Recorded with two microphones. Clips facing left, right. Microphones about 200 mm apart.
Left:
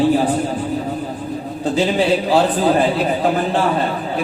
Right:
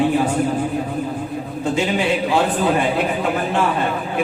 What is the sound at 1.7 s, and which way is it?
Speech, 35° left (ahead or behind).